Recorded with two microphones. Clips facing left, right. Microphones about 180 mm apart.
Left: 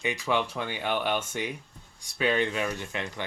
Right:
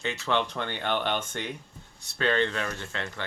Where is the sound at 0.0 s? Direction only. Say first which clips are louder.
Even; 10° left (ahead or behind).